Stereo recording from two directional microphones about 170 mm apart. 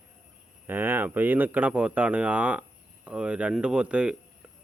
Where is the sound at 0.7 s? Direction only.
10° right (ahead or behind).